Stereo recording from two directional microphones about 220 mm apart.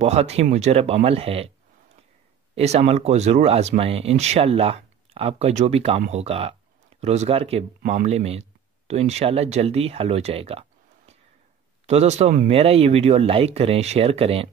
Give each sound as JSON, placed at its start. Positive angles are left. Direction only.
{"t": 0.0, "sound": "speech", "side_deg": -30}
{"t": 2.5, "sound": "speech", "side_deg": -30}
{"t": 11.8, "sound": "speech", "side_deg": -30}